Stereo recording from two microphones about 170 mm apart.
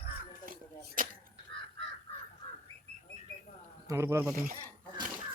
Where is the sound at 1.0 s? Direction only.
55° right (ahead or behind).